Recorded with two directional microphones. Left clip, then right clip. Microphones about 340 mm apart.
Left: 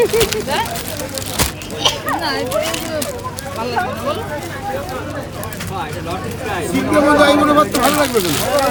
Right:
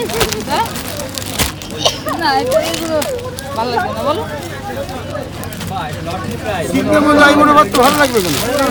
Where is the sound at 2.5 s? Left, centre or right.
Centre.